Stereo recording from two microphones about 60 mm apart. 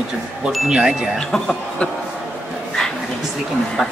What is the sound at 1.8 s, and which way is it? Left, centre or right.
Speech, left.